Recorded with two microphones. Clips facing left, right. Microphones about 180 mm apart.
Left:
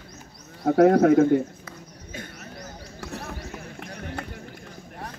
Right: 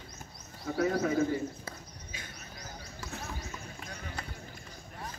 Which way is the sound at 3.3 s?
60° left (ahead or behind).